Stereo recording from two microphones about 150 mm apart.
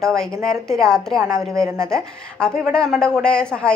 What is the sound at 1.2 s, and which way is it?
Speech, 20° right (ahead or behind).